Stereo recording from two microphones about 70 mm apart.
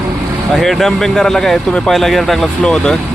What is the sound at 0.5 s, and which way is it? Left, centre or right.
Speech, centre.